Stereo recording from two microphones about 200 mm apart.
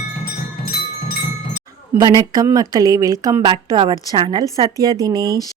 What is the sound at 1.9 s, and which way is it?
Speech, 20° right (ahead or behind).